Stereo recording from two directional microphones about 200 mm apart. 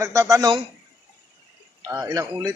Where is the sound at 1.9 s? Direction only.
15° right (ahead or behind).